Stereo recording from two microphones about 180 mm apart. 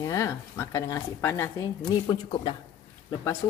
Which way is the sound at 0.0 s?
15° left (ahead or behind).